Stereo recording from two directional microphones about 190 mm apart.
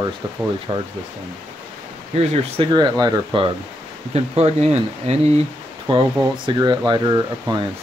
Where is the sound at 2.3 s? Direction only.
25° right (ahead or behind).